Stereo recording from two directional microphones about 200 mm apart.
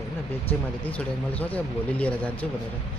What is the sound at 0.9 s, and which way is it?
Speech, 5° left (ahead or behind).